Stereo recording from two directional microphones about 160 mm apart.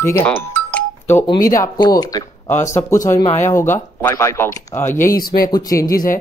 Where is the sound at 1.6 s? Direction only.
25° left (ahead or behind).